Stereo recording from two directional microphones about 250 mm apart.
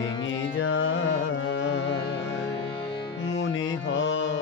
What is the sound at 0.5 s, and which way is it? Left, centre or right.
Carnatic music, left.